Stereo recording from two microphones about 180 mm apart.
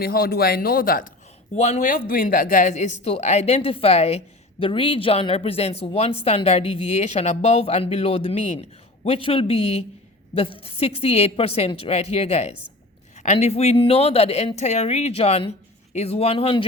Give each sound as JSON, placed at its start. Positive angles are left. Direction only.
{"t": 0.0, "sound": "a man's voice", "side_deg": 55}
{"t": 1.5, "sound": "speech", "side_deg": 40}